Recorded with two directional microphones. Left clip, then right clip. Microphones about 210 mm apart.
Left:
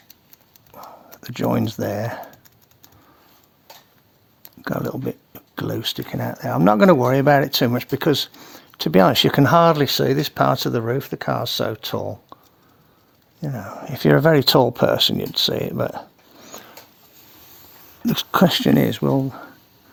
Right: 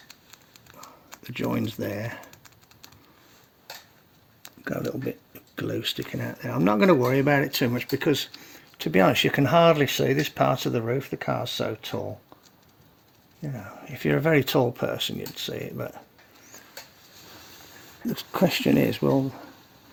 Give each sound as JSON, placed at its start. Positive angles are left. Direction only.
{"t": 0.7, "sound": "a sound", "side_deg": 40}
{"t": 1.3, "sound": "speech", "side_deg": 35}
{"t": 2.3, "sound": "typing", "side_deg": 5}
{"t": 4.4, "sound": "a sound", "side_deg": 15}
{"t": 5.0, "sound": "a sound", "side_deg": 35}
{"t": 6.1, "sound": "speech", "side_deg": 30}
{"t": 13.4, "sound": "speech", "side_deg": 45}
{"t": 18.0, "sound": "speech", "side_deg": 50}
{"t": 18.6, "sound": "speech", "side_deg": 30}